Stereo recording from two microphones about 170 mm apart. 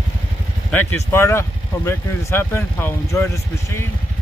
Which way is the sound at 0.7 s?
15° left (ahead or behind).